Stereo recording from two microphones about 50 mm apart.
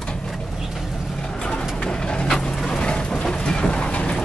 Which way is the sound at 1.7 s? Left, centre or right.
Centre.